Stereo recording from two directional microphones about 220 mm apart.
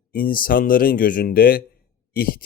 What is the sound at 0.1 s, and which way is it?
Speech, 40° left (ahead or behind).